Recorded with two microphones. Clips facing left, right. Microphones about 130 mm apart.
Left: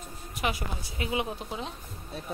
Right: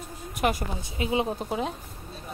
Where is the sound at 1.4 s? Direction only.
50° right (ahead or behind).